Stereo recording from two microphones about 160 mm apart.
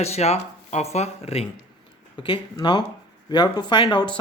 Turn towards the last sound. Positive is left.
turn(degrees=30)  # may be behind; listen again after turning